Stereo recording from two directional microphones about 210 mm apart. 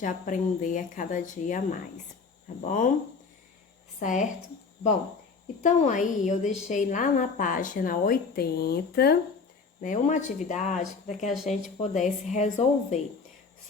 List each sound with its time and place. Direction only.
0.0 s a woman's voice: 40° left (ahead or behind)
4.0 s a woman's voice: 35° left (ahead or behind)
5.6 s a woman's voice: 35° left (ahead or behind)
9.8 s a woman's voice: 35° left (ahead or behind)